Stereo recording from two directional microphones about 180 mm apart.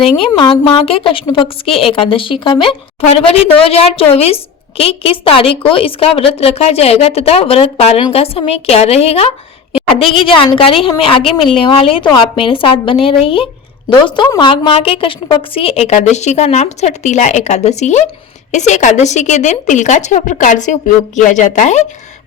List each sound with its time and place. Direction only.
0.2 s a woman's voice: 25° left (ahead or behind)
10.3 s a woman's voice: 30° left (ahead or behind)